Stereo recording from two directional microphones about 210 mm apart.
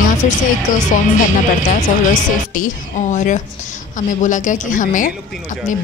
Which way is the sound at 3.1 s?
35° left (ahead or behind).